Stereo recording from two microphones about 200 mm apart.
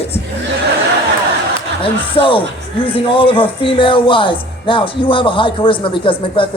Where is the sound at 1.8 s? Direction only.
25° left (ahead or behind).